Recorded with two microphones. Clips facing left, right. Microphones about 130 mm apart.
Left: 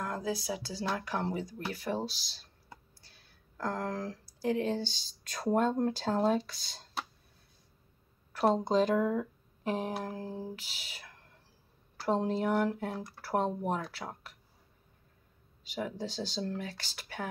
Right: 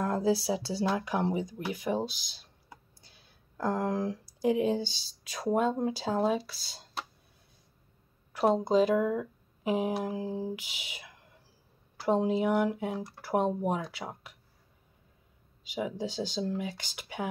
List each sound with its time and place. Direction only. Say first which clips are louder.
0.0 s speech: right 7 dB; 30° right (ahead or behind); by 7.1 s 5° right (ahead or behind)
8.3 s speech: right 2 dB; 10° right (ahead or behind)
15.6 s speech: right 3 dB; 10° right (ahead or behind)